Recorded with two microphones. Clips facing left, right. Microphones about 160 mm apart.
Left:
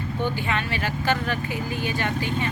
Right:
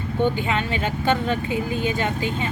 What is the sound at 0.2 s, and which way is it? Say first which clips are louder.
Speech: right 5 dB; 20° right (ahead or behind).